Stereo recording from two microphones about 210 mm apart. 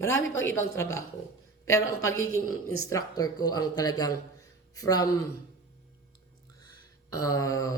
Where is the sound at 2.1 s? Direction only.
80° left.